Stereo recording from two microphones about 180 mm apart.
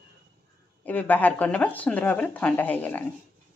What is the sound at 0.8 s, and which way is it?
A woman's voice, 10° left (ahead or behind).